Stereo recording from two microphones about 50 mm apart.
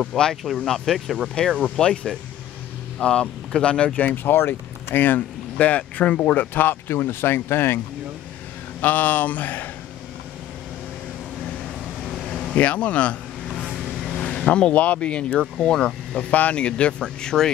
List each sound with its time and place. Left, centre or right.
0.1 s speech: centre
1.6 s speech: centre
4.0 s speech: left
8.8 s speech: left
12.2 s vehicle: centre
12.5 s vehicle: left
14.0 s vehicle: centre
14.7 s speech: left
16.3 s speech: left